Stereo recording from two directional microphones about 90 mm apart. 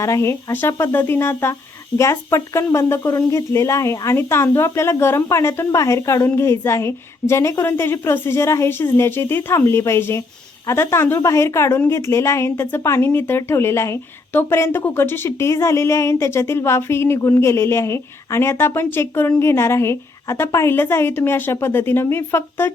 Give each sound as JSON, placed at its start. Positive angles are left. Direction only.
{"t": 0.0, "sound": "speech", "side_deg": 35}